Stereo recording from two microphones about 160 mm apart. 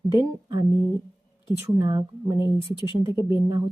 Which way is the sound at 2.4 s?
30° left (ahead or behind).